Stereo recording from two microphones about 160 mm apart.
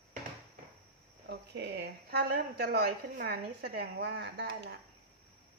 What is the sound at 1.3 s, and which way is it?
A woman's voice, 90° right.